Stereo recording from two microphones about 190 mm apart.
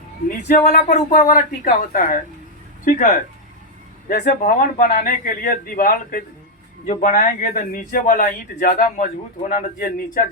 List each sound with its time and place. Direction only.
0.3 s a man's voice: 50° left (ahead or behind)